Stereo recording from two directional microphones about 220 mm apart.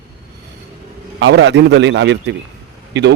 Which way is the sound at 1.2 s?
55° right (ahead or behind).